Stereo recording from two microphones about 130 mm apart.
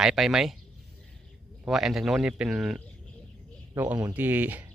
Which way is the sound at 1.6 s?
Centre (ahead or behind).